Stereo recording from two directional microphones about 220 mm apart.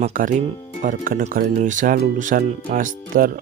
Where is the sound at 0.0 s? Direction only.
40° right (ahead or behind).